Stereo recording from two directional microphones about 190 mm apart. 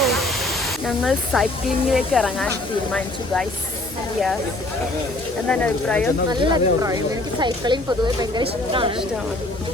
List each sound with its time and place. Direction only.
0.0 s pink noise: centre (ahead or behind)
0.9 s speech: centre (ahead or behind)
5.5 s speech: 5° left (ahead or behind)
6.3 s speech: 25° right (ahead or behind)